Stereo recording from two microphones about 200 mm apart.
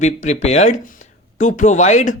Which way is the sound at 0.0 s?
35° left (ahead or behind).